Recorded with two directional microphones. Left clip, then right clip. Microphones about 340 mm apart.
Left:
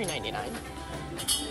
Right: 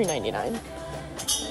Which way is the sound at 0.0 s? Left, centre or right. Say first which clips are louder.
Right 6 dB; centre.